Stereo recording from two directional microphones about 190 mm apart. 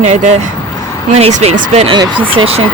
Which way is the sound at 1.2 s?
35° right (ahead or behind).